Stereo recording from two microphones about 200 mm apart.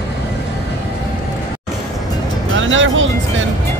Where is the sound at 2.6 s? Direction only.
70° right (ahead or behind).